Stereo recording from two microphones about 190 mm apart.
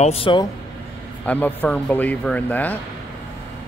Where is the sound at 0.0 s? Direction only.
30° left (ahead or behind).